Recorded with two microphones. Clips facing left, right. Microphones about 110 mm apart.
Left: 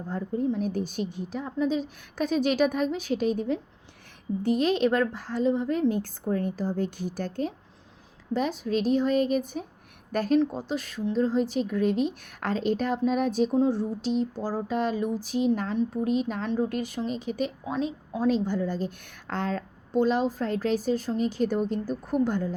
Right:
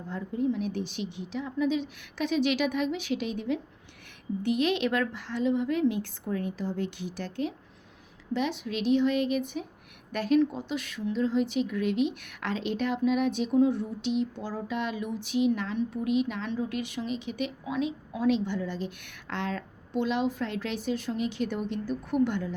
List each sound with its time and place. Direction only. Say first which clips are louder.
0.1 s speech: left 1 dB; 40° left (ahead or behind)